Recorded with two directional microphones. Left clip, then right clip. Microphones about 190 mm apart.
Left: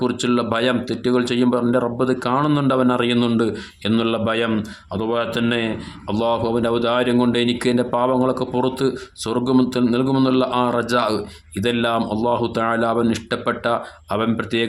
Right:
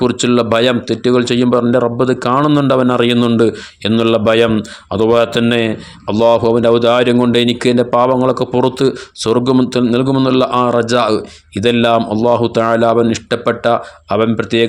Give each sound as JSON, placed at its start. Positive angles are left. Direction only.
{"t": 0.0, "sound": "a man's voice", "side_deg": -30}